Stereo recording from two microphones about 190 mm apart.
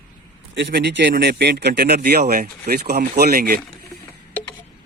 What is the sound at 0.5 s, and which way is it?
Speech, 65° right (ahead or behind).